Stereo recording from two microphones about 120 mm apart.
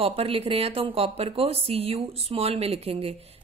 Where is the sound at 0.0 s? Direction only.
55° right (ahead or behind).